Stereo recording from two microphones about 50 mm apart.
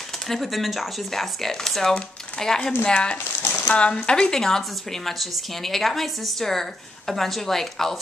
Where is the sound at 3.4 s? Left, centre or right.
Left.